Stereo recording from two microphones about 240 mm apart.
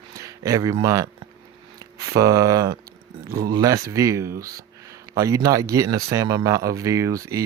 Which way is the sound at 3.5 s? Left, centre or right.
Centre.